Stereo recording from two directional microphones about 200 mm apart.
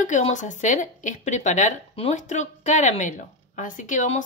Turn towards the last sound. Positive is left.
turn(degrees=40)  # may be behind; listen again after turning